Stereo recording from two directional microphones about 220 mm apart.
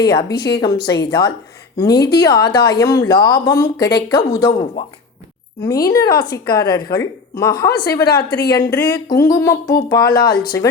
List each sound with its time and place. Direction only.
0.3 s a woman's voice: 50° left (ahead or behind)
0.6 s a woman's voice: 20° left (ahead or behind)
5.6 s speech: 15° left (ahead or behind)
8.3 s a woman's voice: 45° left (ahead or behind)
8.5 s speech: 15° left (ahead or behind)